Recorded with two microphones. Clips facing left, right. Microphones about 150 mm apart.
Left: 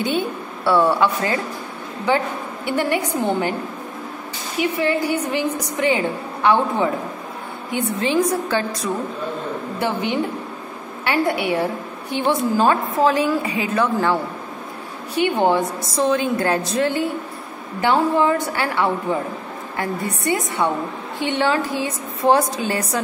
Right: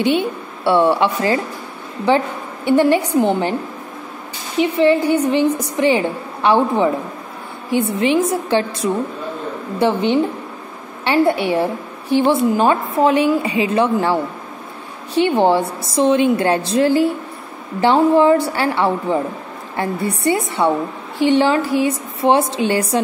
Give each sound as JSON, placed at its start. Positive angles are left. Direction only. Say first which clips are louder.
{"t": 0.0, "sound": "a woman's voice", "louder": "right 5 dB", "side_deg": -25}
{"t": 4.6, "sound": "a woman's voice", "louder": "right 6 dB", "side_deg": -30}
{"t": 15.1, "sound": "a woman's voice", "louder": "right 3 dB", "side_deg": -30}